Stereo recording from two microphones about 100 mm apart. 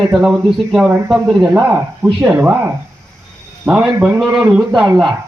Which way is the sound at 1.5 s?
20° right (ahead or behind).